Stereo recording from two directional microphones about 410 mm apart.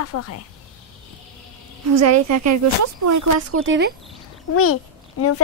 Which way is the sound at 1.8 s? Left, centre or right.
Right.